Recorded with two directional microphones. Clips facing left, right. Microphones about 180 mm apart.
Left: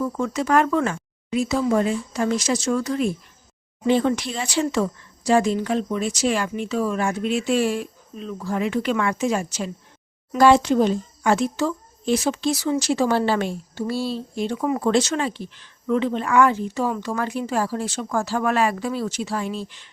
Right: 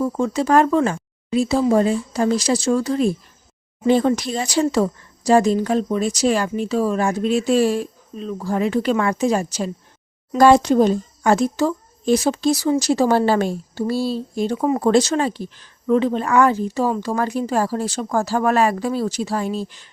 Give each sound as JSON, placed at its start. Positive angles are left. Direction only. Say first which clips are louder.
{"t": 0.0, "sound": "speech", "louder": "right 4 dB", "side_deg": -30}